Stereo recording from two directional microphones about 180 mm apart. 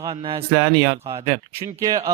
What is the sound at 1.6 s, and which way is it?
Speech, 20° right (ahead or behind).